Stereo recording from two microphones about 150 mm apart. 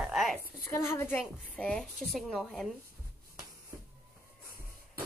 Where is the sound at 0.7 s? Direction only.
15° left (ahead or behind); by 2.6 s centre (ahead or behind).